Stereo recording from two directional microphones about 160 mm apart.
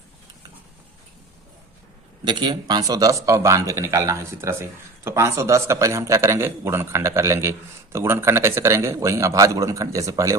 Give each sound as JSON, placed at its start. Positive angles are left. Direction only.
{"t": 2.2, "sound": "speech", "side_deg": -30}